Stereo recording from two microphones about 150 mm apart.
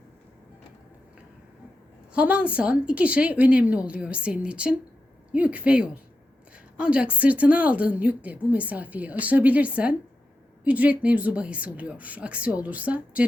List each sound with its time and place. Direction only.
2.1 s a woman's voice: 10° right (ahead or behind)